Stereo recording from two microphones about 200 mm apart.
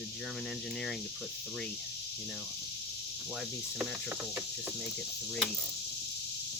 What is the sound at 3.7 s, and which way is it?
Cricket, 10° right (ahead or behind).